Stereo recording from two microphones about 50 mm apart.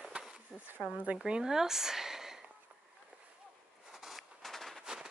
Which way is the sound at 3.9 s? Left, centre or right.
Centre.